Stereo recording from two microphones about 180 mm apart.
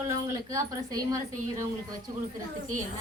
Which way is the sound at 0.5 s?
20° right (ahead or behind).